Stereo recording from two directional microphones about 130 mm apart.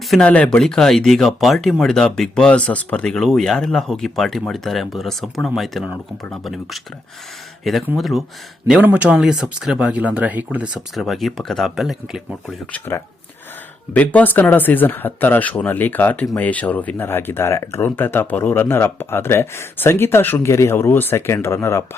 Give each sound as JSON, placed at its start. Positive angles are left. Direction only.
{"t": 0.1, "sound": "speech", "side_deg": 10}
{"t": 10.8, "sound": "speech", "side_deg": 0}
{"t": 12.5, "sound": "speech", "side_deg": 15}